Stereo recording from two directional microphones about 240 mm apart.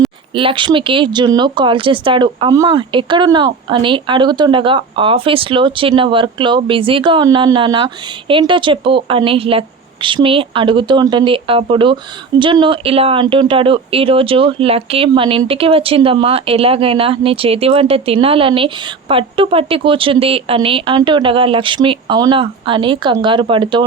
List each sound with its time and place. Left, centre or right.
0.3 s speech: right